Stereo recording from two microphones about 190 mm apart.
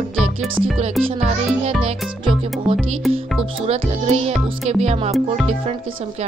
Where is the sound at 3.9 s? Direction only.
35° right (ahead or behind).